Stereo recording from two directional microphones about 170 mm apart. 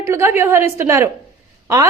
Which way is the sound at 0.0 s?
15° right (ahead or behind).